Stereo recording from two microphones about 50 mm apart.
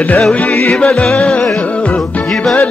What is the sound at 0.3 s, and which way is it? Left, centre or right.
Music, left.